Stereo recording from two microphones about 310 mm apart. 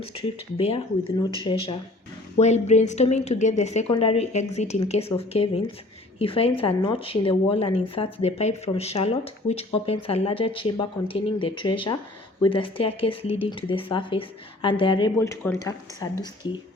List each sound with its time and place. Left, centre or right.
0.0 s speech: centre